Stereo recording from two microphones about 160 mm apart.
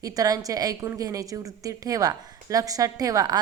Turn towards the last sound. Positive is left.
turn(degrees=-20)  # may be behind; listen again after turning